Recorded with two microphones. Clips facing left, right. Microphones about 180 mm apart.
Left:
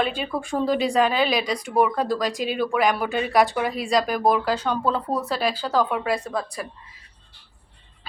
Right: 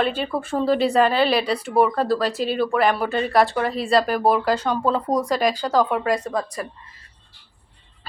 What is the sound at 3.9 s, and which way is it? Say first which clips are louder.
A woman's voice: right 2 dB; 5° right (ahead or behind).